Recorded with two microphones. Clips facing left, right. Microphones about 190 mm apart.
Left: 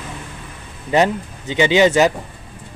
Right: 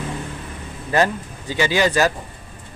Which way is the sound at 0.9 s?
20° left (ahead or behind).